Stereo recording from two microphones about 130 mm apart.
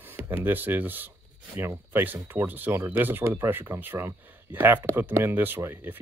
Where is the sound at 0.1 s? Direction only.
15° right (ahead or behind).